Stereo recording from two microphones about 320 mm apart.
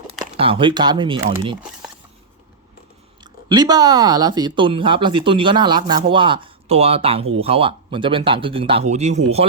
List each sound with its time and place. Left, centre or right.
0.3 s speech: centre
3.5 s speech: centre